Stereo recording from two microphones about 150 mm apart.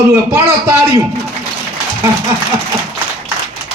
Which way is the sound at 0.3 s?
20° right (ahead or behind).